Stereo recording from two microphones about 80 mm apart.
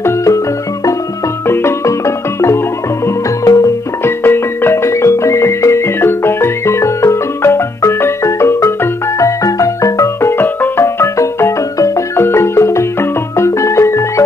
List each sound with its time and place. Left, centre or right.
0.0 s music: left
1.5 s marimba: left
3.4 s music: left
4.0 s music: left
10.3 s music: left
10.8 s marimba: left
13.4 s music: left